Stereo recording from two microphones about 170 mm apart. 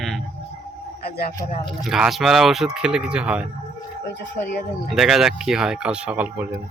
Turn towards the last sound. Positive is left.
turn(degrees=-10)  # may be behind; listen again after turning